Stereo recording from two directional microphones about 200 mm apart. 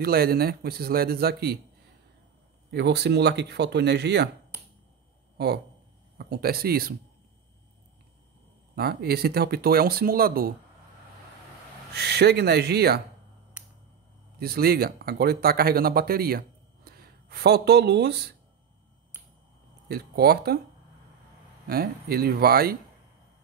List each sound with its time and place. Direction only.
0.0 s speech: 50° right (ahead or behind)
2.7 s speech: 55° right (ahead or behind)
6.1 s speech: 50° right (ahead or behind)
8.7 s speech: 50° right (ahead or behind)
11.9 s speech: 55° right (ahead or behind)
14.4 s speech: 50° right (ahead or behind)
19.9 s speech: 50° right (ahead or behind)
21.6 s speech: 50° right (ahead or behind)